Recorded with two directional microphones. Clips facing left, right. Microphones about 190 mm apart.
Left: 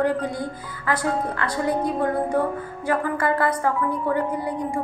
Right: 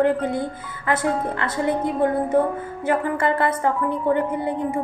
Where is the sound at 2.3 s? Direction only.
20° right (ahead or behind).